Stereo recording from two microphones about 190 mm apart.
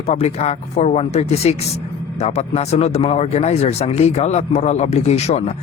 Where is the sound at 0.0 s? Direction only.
35° left (ahead or behind).